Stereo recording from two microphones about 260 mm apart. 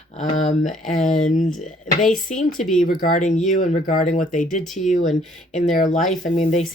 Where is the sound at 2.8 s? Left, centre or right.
Left.